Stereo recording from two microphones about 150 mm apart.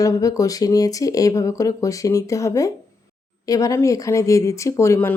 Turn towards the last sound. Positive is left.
turn(degrees=15)  # may be behind; listen again after turning